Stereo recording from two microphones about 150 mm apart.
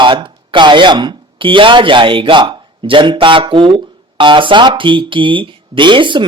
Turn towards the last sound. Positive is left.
turn(degrees=-35)  # may be behind; listen again after turning